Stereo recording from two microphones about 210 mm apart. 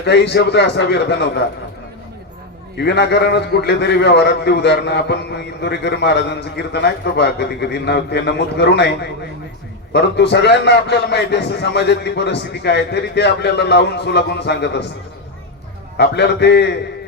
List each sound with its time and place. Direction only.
0.0 s a man's voice: 55° left (ahead or behind)
2.7 s a man's voice: 55° left (ahead or behind)
9.9 s a man's voice: 55° left (ahead or behind)
16.0 s a man's voice: 55° left (ahead or behind)